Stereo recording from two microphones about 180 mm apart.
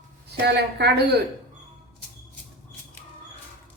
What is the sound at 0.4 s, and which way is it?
Speech, 65° right (ahead or behind).